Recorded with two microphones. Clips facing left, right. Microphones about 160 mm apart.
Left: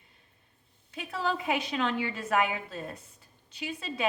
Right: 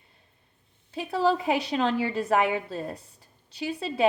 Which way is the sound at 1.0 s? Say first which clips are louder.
Right 7 dB; 35° right (ahead or behind).